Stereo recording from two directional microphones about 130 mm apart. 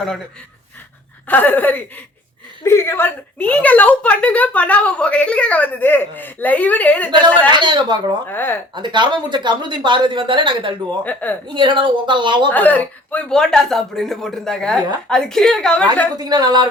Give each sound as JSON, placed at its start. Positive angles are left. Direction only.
{"t": 1.3, "sound": "a woman's voice", "side_deg": 15}
{"t": 7.5, "sound": "speech", "side_deg": -35}
{"t": 8.3, "sound": "a woman's voice", "side_deg": 15}
{"t": 8.7, "sound": "speech", "side_deg": -35}
{"t": 11.0, "sound": "a woman's voice", "side_deg": 15}
{"t": 11.4, "sound": "speech", "side_deg": -35}
{"t": 12.5, "sound": "speech", "side_deg": 15}
{"t": 16.1, "sound": "speech", "side_deg": -30}